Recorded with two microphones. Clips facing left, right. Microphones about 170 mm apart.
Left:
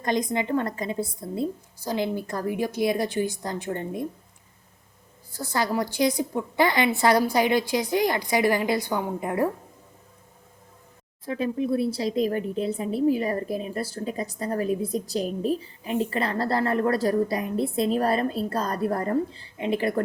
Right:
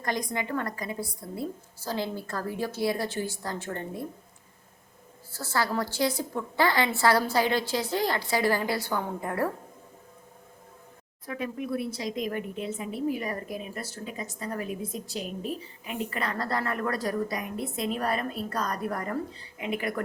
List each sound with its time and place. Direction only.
0.0 s a woman's voice: 20° left (ahead or behind)
5.3 s a woman's voice: 15° left (ahead or behind)
11.3 s speech: 30° left (ahead or behind)